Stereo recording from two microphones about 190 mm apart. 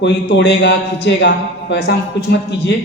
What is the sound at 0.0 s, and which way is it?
A woman's voice, 65° left (ahead or behind).